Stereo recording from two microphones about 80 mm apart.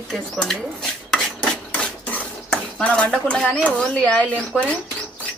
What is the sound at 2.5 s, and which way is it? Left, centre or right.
Dishes, centre.